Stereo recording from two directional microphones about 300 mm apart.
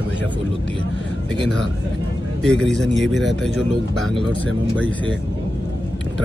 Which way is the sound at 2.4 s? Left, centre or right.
Centre.